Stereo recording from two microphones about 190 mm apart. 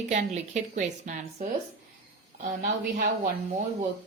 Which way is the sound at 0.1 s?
40° right (ahead or behind).